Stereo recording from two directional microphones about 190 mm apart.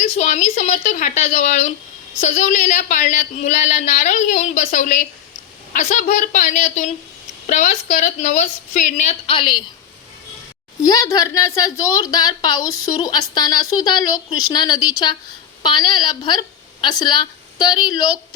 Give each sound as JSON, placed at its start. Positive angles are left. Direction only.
{"t": 0.2, "sound": "speech", "side_deg": 40}
{"t": 10.8, "sound": "a woman's voice", "side_deg": 20}